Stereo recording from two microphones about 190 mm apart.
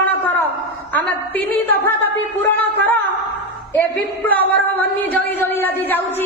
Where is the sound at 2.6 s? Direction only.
10° left (ahead or behind).